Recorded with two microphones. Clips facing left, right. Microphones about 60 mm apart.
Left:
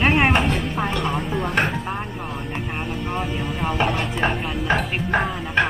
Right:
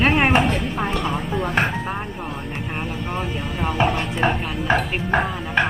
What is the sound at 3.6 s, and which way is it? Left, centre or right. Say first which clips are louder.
Speech: right 2 dB; centre.